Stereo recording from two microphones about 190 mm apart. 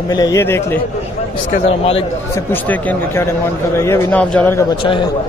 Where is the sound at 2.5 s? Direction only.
10° left (ahead or behind).